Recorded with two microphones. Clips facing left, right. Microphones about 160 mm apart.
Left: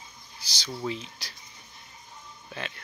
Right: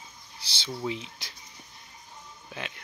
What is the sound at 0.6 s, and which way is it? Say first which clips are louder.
Speech: even; 15° right (ahead or behind).